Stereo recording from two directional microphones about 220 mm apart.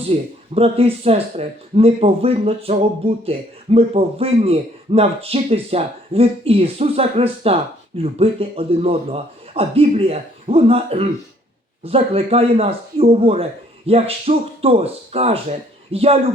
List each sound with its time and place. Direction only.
0.1 s speech: 25° right (ahead or behind)